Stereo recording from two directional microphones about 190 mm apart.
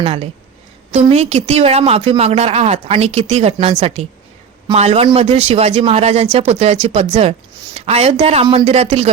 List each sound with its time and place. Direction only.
0.0 s a man's voice: 30° right (ahead or behind)